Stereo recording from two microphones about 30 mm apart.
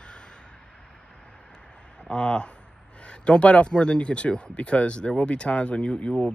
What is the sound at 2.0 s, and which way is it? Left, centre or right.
Speech, left.